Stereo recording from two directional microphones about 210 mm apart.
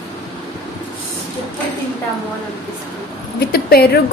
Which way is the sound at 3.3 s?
50° left (ahead or behind).